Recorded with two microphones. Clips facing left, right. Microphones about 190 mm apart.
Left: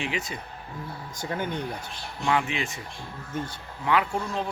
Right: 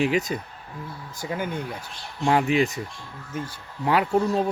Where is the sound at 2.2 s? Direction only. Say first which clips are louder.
Right 6 dB; 40° right (ahead or behind).